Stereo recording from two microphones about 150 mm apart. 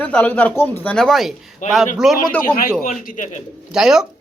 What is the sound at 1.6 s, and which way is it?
Speech, 55° left (ahead or behind).